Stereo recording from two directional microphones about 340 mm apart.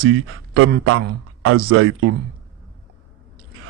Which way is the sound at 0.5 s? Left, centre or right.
Right.